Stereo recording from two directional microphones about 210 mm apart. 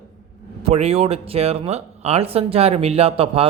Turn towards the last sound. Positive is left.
turn(degrees=-25)  # may be behind; listen again after turning